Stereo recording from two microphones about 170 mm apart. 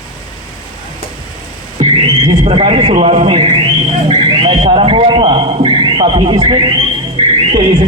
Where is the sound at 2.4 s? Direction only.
35° right (ahead or behind).